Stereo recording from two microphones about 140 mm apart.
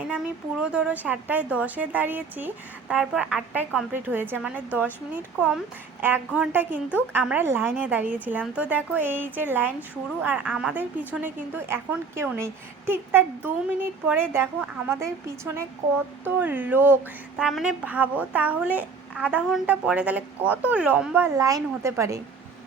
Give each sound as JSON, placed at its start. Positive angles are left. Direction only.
{"t": 0.6, "sound": "a woman's voice", "side_deg": -5}
{"t": 16.2, "sound": "a woman's voice", "side_deg": -15}
{"t": 17.3, "sound": "a woman's voice", "side_deg": 0}
{"t": 21.3, "sound": "a woman's voice", "side_deg": -25}